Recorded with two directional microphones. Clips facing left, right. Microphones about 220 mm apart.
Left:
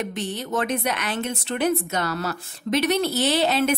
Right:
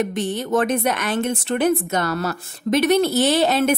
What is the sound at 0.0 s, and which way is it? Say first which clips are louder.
A woman's voice: right 6 dB; 50° right (ahead or behind).